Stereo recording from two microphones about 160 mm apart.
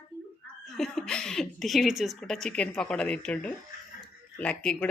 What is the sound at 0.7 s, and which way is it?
Speech, centre (ahead or behind).